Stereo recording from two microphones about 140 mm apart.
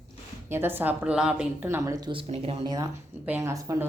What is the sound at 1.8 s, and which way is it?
Speech, 25° right (ahead or behind).